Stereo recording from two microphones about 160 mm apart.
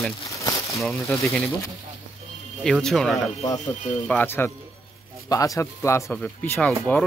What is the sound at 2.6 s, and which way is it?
Speech, 5° left (ahead or behind).